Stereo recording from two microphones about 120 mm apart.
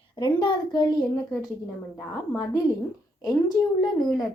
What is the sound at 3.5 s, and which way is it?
Speech, 35° left (ahead or behind).